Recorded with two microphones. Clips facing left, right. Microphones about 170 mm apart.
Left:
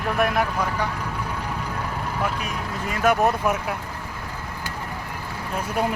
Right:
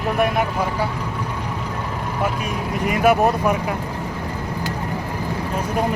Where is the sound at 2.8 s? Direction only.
15° right (ahead or behind).